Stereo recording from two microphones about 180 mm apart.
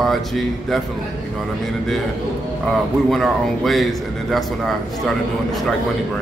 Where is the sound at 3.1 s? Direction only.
Centre (ahead or behind).